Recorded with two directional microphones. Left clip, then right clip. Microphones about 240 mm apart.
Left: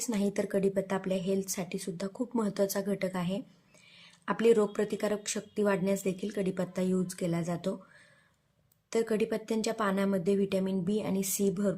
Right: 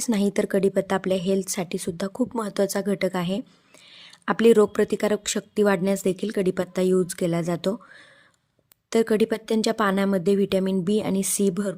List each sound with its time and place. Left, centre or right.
0.0 s speech: right
8.9 s speech: right